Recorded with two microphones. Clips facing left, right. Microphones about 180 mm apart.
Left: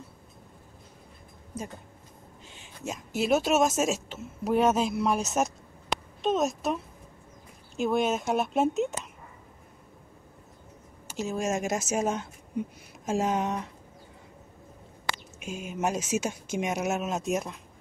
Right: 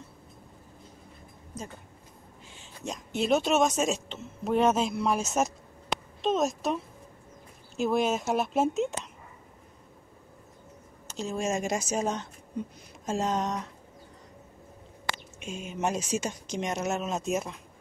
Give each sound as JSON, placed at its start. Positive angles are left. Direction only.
{"t": 1.5, "sound": "a sound", "side_deg": 10}
{"t": 2.8, "sound": "a woman's voice", "side_deg": 5}
{"t": 11.1, "sound": "speech", "side_deg": 5}
{"t": 15.3, "sound": "a woman's voice", "side_deg": 5}